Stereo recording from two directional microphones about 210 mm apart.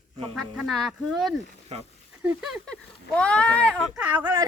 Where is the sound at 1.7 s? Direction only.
30° right (ahead or behind).